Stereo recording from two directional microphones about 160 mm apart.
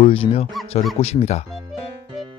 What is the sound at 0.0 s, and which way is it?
Speech, 40° left (ahead or behind).